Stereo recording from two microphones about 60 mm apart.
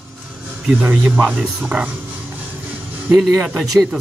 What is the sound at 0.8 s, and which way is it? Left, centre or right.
Speech, right.